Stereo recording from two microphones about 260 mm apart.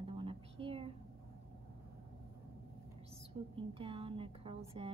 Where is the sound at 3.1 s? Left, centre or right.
Right.